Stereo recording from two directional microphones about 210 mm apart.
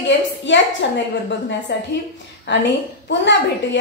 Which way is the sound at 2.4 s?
55° left (ahead or behind).